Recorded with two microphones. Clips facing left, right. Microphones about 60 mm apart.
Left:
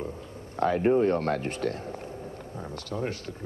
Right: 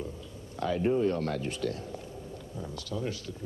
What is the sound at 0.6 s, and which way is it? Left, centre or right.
Speech, left.